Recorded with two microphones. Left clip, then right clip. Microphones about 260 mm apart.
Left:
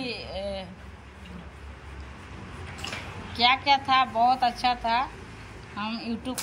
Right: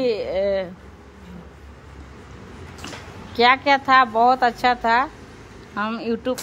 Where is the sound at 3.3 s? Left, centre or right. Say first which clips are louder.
Right 5 dB; centre.